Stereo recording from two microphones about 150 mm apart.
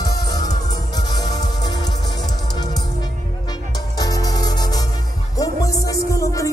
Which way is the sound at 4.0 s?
25° left (ahead or behind).